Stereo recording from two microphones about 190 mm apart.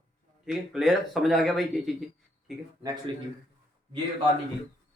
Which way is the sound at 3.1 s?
25° right (ahead or behind).